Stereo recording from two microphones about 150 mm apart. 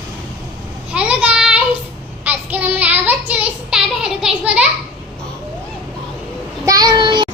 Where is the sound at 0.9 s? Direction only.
10° right (ahead or behind).